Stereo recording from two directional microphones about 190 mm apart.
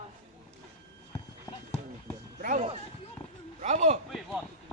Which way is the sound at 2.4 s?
45° right (ahead or behind).